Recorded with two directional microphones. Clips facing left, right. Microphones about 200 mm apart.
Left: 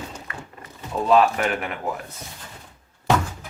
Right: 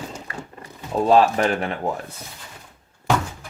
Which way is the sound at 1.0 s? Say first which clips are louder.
Right 2 dB; 35° right (ahead or behind).